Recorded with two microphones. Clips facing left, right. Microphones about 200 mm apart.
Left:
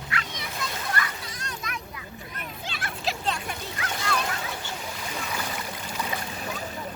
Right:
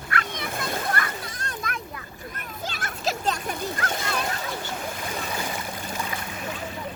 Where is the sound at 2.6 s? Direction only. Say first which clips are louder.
Right 3 dB; 45° right (ahead or behind).